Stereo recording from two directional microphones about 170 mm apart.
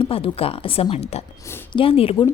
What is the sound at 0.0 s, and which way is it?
A woman's voice, 35° left (ahead or behind).